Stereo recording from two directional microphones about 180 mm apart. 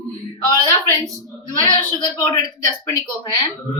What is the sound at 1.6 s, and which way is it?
A woman's voice, 25° left (ahead or behind).